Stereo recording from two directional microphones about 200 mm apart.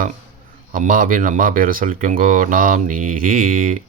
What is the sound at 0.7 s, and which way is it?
Speech, 45° right (ahead or behind).